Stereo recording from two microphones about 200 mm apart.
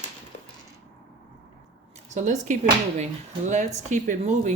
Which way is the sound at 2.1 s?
35° right (ahead or behind).